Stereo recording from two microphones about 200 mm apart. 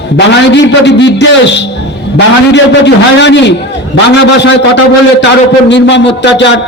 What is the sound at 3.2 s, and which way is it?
Speech, 60° left (ahead or behind).